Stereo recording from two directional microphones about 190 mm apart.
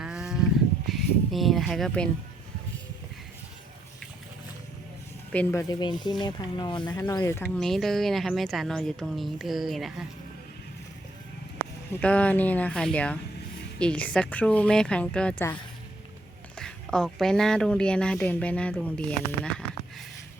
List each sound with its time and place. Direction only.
0.0 s a sound: 5° right (ahead or behind)
0.9 s speech: centre (ahead or behind)
5.3 s speech: 10° left (ahead or behind)
7.4 s speech: centre (ahead or behind)
11.9 s speech: 5° left (ahead or behind)
16.6 s speech: 5° left (ahead or behind)